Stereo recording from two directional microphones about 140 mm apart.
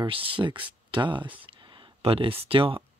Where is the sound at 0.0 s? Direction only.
40° right (ahead or behind).